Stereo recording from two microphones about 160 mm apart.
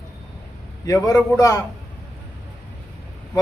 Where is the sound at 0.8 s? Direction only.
20° left (ahead or behind).